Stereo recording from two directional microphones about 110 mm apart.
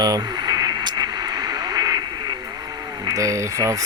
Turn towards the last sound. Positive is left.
turn(degrees=-30)  # may be behind; listen again after turning